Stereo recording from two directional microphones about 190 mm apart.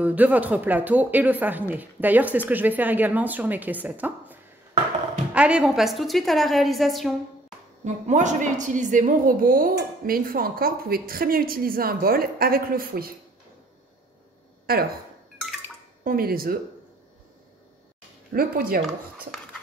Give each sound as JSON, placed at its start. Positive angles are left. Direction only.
{"t": 0.0, "sound": "a woman's voice", "side_deg": -10}
{"t": 7.8, "sound": "a woman's voice", "side_deg": -40}
{"t": 14.7, "sound": "a woman's voice", "side_deg": -50}
{"t": 16.0, "sound": "a woman's voice", "side_deg": -50}
{"t": 18.3, "sound": "a woman's voice", "side_deg": -50}